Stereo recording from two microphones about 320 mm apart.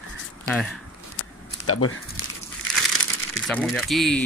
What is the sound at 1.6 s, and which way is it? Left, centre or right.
Speech, left.